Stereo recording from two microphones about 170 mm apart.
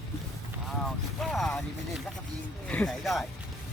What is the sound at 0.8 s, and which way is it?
Speech, centre (ahead or behind).